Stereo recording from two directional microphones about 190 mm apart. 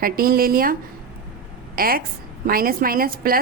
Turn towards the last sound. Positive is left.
turn(degrees=-50)  # may be behind; listen again after turning